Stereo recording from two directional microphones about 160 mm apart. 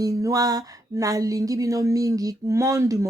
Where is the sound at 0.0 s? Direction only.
20° right (ahead or behind).